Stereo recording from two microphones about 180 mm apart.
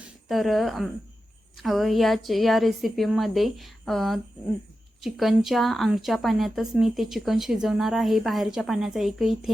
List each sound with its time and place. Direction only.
0.3 s a woman's voice: centre (ahead or behind)